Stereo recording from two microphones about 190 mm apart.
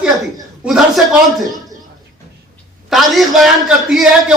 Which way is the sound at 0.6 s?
Centre (ahead or behind).